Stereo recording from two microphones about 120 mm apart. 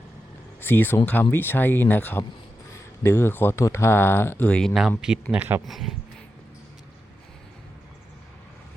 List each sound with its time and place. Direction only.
0.6 s speech: 15° left (ahead or behind)
4.7 s speech: 5° right (ahead or behind)
5.6 s speech: centre (ahead or behind)